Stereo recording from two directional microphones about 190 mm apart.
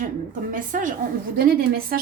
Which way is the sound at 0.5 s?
45° right (ahead or behind).